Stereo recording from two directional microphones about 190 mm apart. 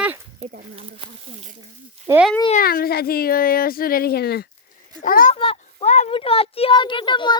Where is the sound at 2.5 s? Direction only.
50° left (ahead or behind).